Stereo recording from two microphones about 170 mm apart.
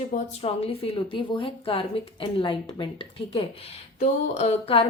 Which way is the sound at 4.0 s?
45° left (ahead or behind).